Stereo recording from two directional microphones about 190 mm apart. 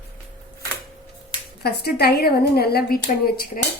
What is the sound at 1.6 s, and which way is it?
Speech, 55° left (ahead or behind).